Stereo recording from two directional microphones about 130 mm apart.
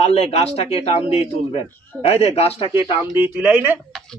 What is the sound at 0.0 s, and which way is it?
Speech, 55° left (ahead or behind).